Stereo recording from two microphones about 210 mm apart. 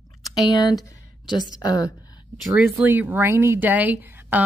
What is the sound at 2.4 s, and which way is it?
Speech, 5° right (ahead or behind).